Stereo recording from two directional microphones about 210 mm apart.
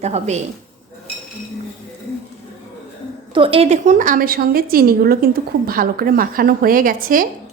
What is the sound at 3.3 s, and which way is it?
A woman's voice, 25° right (ahead or behind).